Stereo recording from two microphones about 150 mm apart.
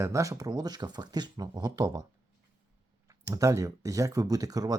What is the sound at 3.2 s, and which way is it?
Speech, 20° right (ahead or behind).